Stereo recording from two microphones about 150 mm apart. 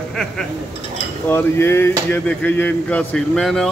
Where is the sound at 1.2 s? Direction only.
15° left (ahead or behind).